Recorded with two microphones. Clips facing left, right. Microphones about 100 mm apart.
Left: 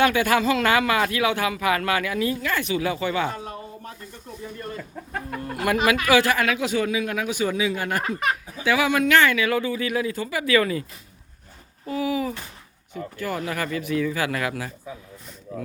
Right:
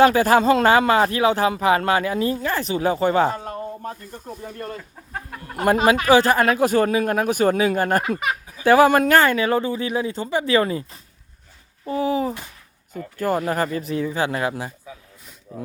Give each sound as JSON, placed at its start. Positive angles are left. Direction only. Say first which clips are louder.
{"t": 0.0, "sound": "speech", "louder": "right 5 dB", "side_deg": -35}
{"t": 5.5, "sound": "speech", "louder": "right 4 dB", "side_deg": -35}
{"t": 11.9, "sound": "speech", "louder": "right 3 dB", "side_deg": -35}